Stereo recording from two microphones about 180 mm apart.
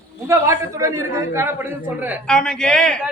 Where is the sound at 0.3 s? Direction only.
15° right (ahead or behind).